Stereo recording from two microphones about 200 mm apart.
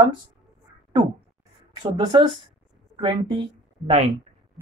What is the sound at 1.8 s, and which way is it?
A woman's voice, 25° right (ahead or behind).